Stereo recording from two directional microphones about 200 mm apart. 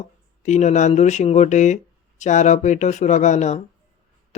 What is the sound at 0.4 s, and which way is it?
Speech, 35° left (ahead or behind).